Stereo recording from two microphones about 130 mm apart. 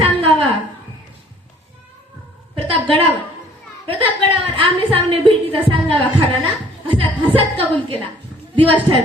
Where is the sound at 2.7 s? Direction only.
45° right (ahead or behind).